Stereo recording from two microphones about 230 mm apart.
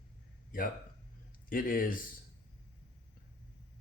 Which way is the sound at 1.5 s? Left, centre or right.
Left.